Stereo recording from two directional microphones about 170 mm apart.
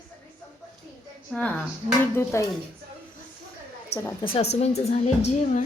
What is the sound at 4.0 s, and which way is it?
Speech, 15° left (ahead or behind).